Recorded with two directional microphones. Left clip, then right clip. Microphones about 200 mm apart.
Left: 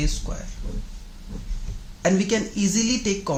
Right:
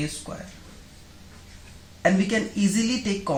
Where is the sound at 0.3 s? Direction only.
35° left (ahead or behind).